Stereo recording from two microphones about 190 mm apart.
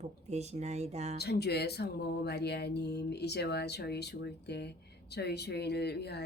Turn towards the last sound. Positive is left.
turn(degrees=60)  # may be behind; listen again after turning